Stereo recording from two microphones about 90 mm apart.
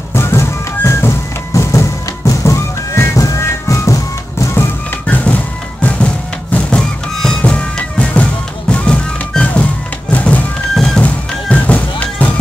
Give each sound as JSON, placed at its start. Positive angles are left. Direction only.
{"t": 0.1, "sound": "music", "side_deg": 30}
{"t": 5.0, "sound": "music", "side_deg": 15}